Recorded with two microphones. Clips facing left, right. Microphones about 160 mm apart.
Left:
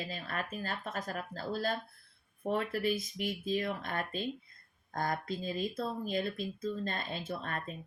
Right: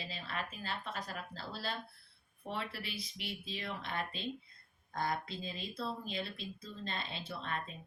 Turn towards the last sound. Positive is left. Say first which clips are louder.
# left 3 dB
turn(degrees=50)  # may be behind; listen again after turning